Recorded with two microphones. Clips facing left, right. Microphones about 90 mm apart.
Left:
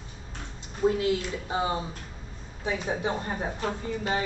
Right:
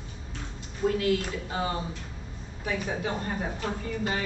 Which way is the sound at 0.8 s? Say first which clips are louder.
Left 1 dB; 20° left (ahead or behind).